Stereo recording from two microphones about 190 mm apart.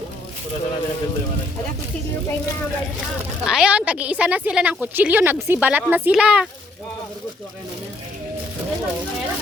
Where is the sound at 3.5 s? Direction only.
5° right (ahead or behind).